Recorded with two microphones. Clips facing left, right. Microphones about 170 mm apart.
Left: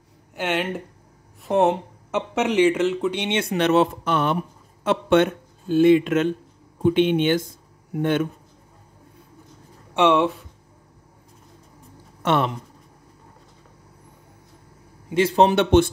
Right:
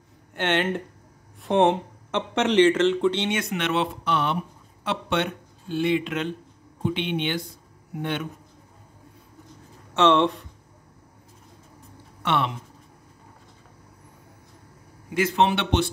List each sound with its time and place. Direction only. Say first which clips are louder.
0.3 s speech: right 1 dB; 5° left (ahead or behind)
3.3 s speech: left 6 dB; 30° left (ahead or behind); by 8.3 s 45° left (ahead or behind)
9.9 s speech: left 1 dB; 10° left (ahead or behind)
12.2 s speech: left 4 dB; 40° left (ahead or behind)
15.0 s a man's voice: left 4 dB; 30° left (ahead or behind); by 15.9 s 45° left (ahead or behind)